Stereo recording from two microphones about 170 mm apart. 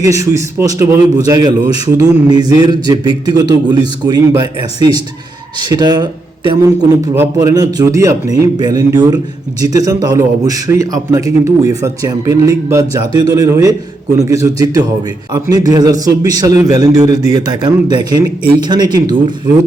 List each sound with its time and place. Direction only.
0.0 s a man's voice: 20° right (ahead or behind)
5.5 s a man's voice: 25° right (ahead or behind)
7.1 s a man's voice: 15° right (ahead or behind)